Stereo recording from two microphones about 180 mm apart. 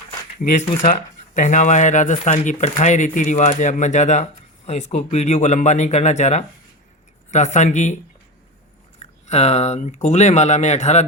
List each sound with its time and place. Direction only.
0.4 s speech: 50° left (ahead or behind)
9.2 s speech: 35° left (ahead or behind)